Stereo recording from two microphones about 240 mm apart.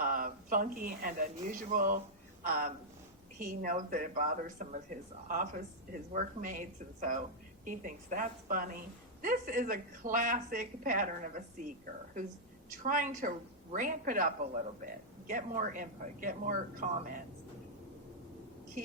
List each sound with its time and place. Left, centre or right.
0.0 s a sound: right
1.5 s a woman's voice: right
12.8 s a woman's voice: right